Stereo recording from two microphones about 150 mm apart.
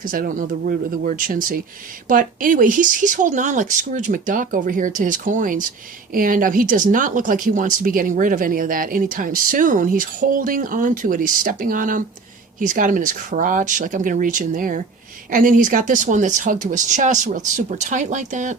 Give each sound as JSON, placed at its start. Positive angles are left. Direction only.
{"t": 0.0, "sound": "speech", "side_deg": -70}